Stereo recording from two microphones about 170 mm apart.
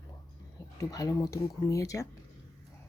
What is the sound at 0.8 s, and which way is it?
Speech, 20° left (ahead or behind).